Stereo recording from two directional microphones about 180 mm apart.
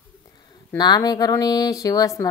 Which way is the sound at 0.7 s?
25° left (ahead or behind).